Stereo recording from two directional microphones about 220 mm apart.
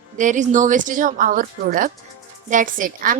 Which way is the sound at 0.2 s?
35° right (ahead or behind).